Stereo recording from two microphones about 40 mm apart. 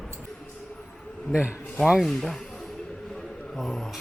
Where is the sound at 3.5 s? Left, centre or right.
Centre.